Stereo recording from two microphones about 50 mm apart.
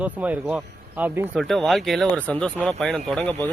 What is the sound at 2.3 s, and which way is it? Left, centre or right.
Speech, centre.